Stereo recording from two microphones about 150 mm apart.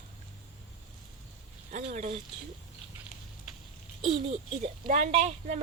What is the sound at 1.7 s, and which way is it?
Speech, 55° right (ahead or behind).